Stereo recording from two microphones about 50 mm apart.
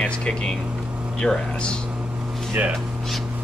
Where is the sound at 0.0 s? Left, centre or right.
Left.